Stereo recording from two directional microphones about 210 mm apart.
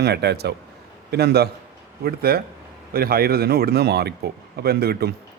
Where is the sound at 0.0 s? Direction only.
50° right (ahead or behind).